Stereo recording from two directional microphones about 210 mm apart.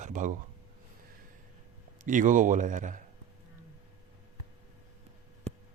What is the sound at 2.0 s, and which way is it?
Speech, 40° right (ahead or behind).